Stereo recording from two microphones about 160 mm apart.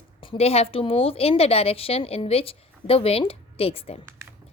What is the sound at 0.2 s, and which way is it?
A woman's voice, 35° left (ahead or behind).